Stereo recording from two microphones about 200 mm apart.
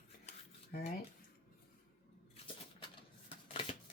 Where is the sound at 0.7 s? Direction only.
50° left (ahead or behind).